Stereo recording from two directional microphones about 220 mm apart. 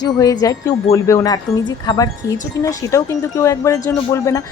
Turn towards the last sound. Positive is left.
turn(degrees=15)  # may be behind; listen again after turning